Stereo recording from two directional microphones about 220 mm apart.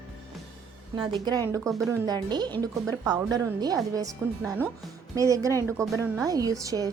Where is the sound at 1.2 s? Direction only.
15° right (ahead or behind).